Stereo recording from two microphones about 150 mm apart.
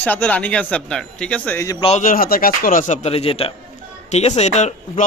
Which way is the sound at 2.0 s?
65° left (ahead or behind).